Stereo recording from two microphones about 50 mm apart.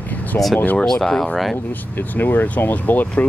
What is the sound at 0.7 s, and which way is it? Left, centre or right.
Speech, centre.